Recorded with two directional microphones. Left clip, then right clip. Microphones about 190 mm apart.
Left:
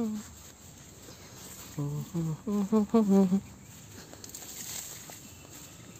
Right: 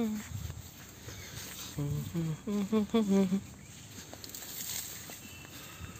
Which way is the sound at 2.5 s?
30° left (ahead or behind).